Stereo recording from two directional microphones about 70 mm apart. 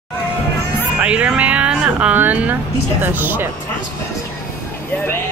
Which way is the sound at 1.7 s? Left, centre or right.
Centre.